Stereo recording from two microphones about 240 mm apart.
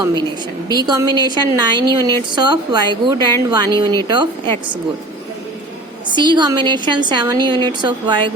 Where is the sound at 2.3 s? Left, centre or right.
Centre.